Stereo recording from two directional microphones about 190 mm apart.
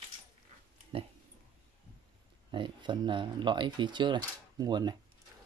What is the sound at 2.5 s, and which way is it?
Speech, 25° right (ahead or behind).